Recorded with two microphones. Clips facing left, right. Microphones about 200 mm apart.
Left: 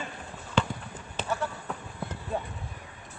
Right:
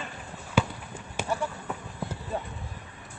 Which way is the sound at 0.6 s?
10° right (ahead or behind).